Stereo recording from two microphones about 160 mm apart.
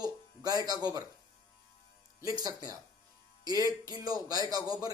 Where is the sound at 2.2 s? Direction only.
25° right (ahead or behind).